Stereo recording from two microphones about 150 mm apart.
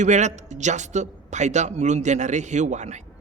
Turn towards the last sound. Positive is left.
turn(degrees=-50)  # may be behind; listen again after turning